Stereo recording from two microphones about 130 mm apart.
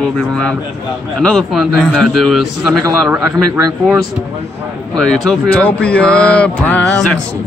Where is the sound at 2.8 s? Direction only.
25° right (ahead or behind).